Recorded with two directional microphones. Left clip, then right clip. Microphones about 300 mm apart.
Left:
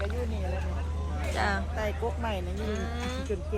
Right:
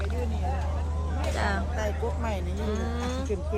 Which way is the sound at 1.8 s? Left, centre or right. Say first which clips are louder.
Left 1 dB; centre.